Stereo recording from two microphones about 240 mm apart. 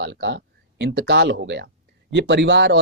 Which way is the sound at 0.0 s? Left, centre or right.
Right.